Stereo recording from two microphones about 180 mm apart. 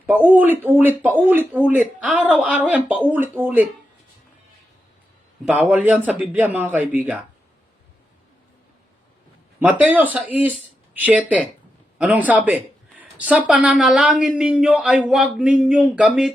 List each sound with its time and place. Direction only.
0.3 s speech: 10° right (ahead or behind)
5.5 s speech: 5° right (ahead or behind)
9.6 s speech: 10° right (ahead or behind)
12.5 s a sound: 10° right (ahead or behind)
13.5 s speech: 5° right (ahead or behind)